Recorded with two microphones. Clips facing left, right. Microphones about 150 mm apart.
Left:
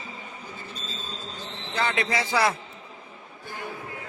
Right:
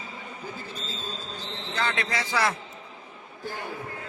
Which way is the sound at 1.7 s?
10° left (ahead or behind).